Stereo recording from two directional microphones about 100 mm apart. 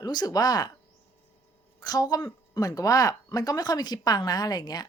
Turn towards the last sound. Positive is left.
turn(degrees=40)  # may be behind; listen again after turning